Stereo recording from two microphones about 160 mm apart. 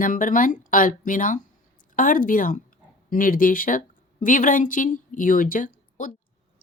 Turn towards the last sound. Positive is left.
turn(degrees=55)  # may be behind; listen again after turning